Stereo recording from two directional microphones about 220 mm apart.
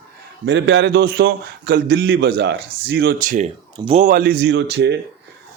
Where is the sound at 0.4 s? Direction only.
50° right (ahead or behind).